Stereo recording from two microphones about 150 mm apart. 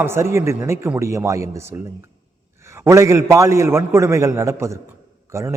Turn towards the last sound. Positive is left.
turn(degrees=-20)  # may be behind; listen again after turning